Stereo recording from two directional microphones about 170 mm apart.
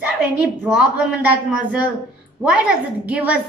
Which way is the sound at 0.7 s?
5° right (ahead or behind).